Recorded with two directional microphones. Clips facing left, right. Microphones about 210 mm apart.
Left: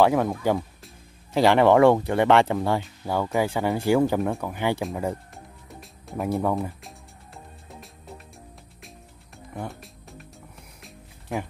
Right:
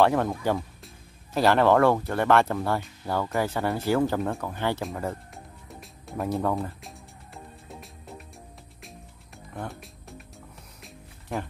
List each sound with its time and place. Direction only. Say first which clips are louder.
0.0 s speech: left 2 dB; 5° left (ahead or behind)
5.3 s music: even; centre (ahead or behind)
6.2 s speech: left 2 dB; 10° left (ahead or behind)
9.5 s music: left 2 dB; 5° left (ahead or behind)
11.3 s speech: left 2 dB; centre (ahead or behind)